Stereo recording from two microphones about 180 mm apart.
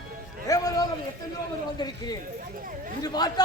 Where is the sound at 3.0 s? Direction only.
20° left (ahead or behind).